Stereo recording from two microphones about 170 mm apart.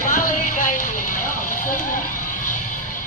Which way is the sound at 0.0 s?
50° left (ahead or behind).